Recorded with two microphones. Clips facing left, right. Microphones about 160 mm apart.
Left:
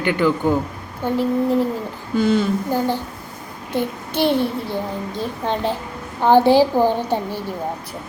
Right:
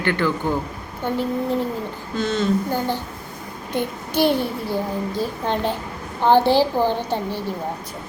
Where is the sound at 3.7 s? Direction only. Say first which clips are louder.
Left 1 dB; centre (ahead or behind).